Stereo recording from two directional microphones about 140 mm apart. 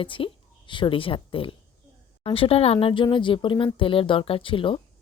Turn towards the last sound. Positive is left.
turn(degrees=40)  # may be behind; listen again after turning